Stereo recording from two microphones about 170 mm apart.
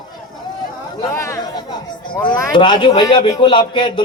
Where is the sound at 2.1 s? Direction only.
10° left (ahead or behind).